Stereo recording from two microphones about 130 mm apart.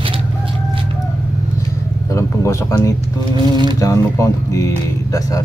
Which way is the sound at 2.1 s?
25° left (ahead or behind).